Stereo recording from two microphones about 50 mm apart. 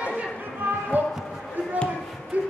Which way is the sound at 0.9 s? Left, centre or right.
Right.